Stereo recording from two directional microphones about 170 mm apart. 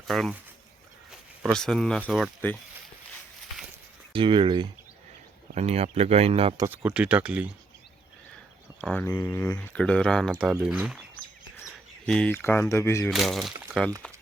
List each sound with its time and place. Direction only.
0.1 s speech: centre (ahead or behind)
1.1 s a sound: 10° right (ahead or behind)
1.5 s speech: 5° left (ahead or behind)
4.1 s speech: 30° right (ahead or behind)
5.5 s speech: 40° right (ahead or behind)
6.7 s speech: 10° right (ahead or behind)
8.8 s speech: 5° left (ahead or behind)
12.0 s speech: 5° left (ahead or behind)
13.1 s speech: centre (ahead or behind)